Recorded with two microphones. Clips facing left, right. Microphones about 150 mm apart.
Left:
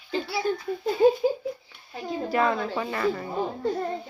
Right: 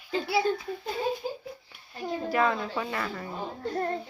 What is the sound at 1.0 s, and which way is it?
Speech, 55° left (ahead or behind).